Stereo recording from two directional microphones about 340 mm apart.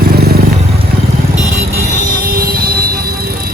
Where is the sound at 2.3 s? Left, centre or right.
Right.